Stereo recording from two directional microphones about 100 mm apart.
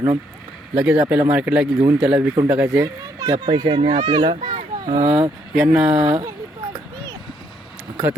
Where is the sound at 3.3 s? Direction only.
55° right (ahead or behind).